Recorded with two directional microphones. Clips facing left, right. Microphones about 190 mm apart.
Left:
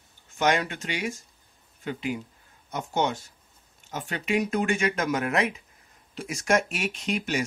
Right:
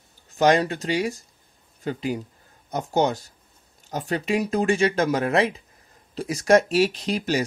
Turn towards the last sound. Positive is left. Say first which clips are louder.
# right 4 dB
turn(degrees=-35)  # may be behind; listen again after turning